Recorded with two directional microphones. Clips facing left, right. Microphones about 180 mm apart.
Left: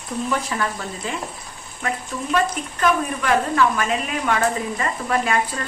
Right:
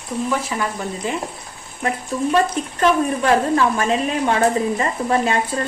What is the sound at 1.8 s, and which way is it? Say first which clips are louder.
Speech: right 5 dB; 30° right (ahead or behind).